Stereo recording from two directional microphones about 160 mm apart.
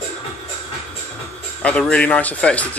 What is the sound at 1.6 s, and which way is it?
A man's voice, 5° left (ahead or behind).